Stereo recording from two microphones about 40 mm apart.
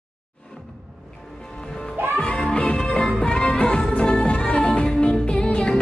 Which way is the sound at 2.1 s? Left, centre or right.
Centre.